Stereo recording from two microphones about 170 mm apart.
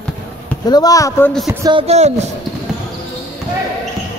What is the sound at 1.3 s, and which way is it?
Speech, centre (ahead or behind).